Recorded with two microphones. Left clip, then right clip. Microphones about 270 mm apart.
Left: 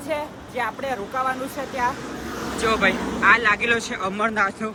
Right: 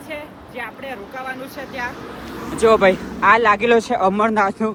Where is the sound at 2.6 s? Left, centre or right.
Centre.